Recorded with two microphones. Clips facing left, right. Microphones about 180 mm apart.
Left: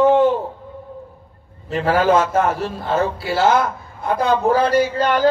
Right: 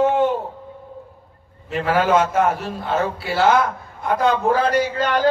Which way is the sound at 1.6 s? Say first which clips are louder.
Left 2 dB; 35° left (ahead or behind).